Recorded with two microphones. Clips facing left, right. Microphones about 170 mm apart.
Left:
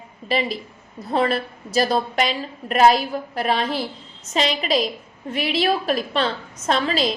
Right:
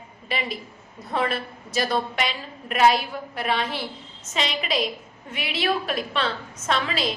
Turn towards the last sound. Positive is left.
turn(degrees=35)  # may be behind; listen again after turning